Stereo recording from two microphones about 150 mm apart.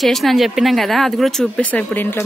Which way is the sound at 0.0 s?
Centre (ahead or behind).